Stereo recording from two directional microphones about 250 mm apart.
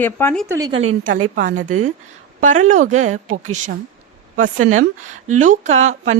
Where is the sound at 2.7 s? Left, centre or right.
Right.